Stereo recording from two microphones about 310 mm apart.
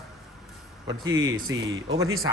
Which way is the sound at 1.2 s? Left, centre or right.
Right.